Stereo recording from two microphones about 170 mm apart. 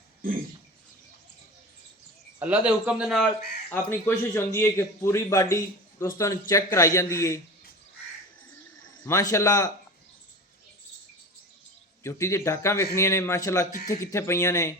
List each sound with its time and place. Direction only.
2.4 s speech: 10° right (ahead or behind)
3.7 s a man's voice: 15° left (ahead or behind)
9.0 s speech: 15° left (ahead or behind)
12.0 s a man's voice: 15° left (ahead or behind)
13.7 s speech: 50° left (ahead or behind)
14.0 s a man's voice: 15° left (ahead or behind)